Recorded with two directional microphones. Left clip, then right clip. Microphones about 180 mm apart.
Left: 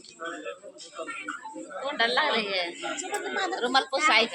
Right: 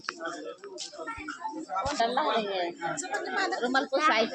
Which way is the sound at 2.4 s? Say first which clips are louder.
Left 2 dB; 45° right (ahead or behind).